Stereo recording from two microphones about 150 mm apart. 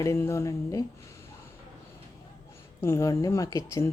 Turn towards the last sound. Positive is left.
turn(degrees=20)  # may be behind; listen again after turning